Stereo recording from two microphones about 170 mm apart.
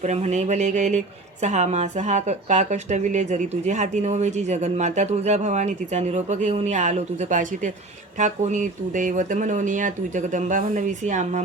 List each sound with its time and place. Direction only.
0.0 s speech: 40° right (ahead or behind)